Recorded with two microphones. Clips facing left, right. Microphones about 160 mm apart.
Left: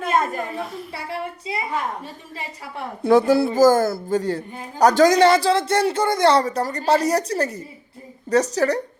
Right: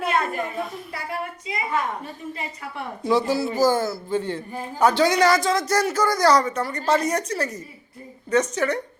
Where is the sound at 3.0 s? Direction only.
50° left (ahead or behind).